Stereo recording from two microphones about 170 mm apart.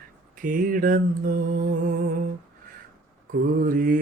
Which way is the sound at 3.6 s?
55° right (ahead or behind).